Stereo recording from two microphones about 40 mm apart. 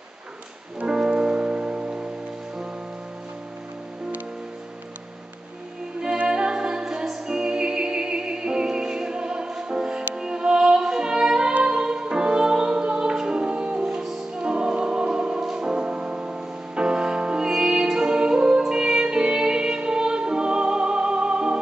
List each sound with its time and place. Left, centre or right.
0.8 s music: right
6.2 s music: right